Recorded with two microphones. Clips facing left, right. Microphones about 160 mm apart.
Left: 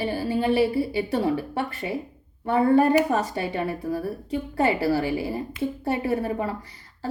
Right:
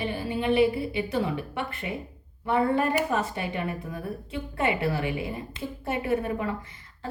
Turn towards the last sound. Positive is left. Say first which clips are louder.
# left 2 dB
turn(degrees=35)  # may be behind; listen again after turning